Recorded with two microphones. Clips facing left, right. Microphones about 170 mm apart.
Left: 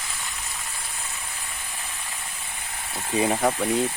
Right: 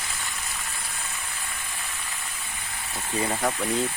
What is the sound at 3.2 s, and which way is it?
Speech, 20° left (ahead or behind).